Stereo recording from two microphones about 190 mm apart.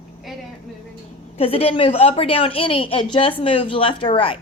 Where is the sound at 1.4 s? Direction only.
30° left (ahead or behind).